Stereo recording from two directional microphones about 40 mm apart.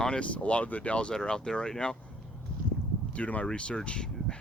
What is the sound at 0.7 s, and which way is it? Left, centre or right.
Speech, left.